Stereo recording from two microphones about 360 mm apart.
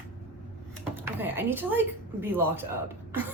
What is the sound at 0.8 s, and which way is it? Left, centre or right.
Speech, centre.